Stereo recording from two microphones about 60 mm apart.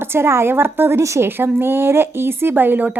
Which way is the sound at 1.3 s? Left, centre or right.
Right.